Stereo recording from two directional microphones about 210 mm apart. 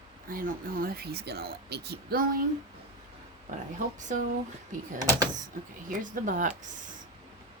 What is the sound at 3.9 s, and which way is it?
Speech, 35° right (ahead or behind).